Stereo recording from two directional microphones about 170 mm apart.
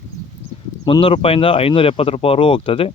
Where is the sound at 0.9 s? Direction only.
30° left (ahead or behind).